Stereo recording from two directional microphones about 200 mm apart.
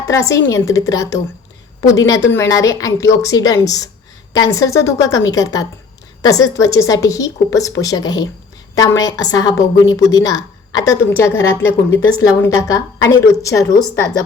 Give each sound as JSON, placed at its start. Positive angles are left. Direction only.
{"t": 0.1, "sound": "a woman's voice", "side_deg": 15}